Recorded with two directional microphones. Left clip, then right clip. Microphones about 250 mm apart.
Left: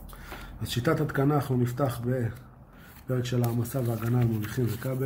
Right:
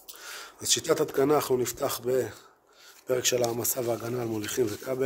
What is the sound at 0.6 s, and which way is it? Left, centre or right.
Speech, right.